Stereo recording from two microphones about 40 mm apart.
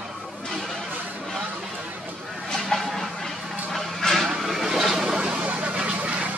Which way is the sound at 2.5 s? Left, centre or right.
Centre.